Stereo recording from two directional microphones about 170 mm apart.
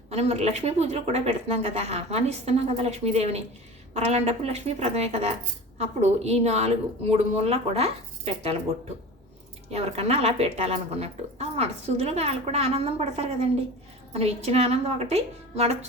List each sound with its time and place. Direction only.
0.1 s speech: 40° right (ahead or behind)
9.7 s speech: 40° right (ahead or behind)